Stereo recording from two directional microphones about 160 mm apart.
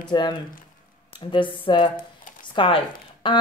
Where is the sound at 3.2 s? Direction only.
30° left (ahead or behind).